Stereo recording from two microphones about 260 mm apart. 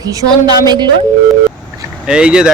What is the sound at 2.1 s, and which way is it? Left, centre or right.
Speech, centre.